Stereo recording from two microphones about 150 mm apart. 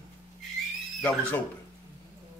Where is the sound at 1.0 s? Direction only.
10° left (ahead or behind).